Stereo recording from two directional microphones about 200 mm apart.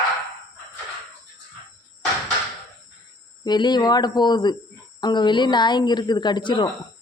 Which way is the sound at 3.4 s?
20° left (ahead or behind).